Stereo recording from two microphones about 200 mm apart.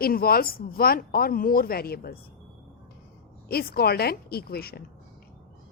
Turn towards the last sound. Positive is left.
turn(degrees=50)  # may be behind; listen again after turning